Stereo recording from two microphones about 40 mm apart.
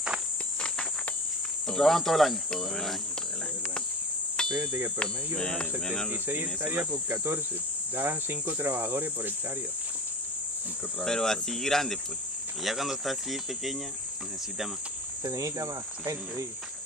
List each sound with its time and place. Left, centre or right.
1.7 s speech: centre
4.4 s cricket: left
5.4 s speech: centre
6.0 s speech: right
6.9 s cricket: right
7.9 s cricket: right
11.1 s speech: centre
12.6 s speech: centre